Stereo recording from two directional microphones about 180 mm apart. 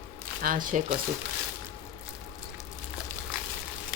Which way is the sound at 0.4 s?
50° right (ahead or behind).